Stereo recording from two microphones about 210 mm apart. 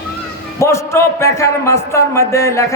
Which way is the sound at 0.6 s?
15° left (ahead or behind).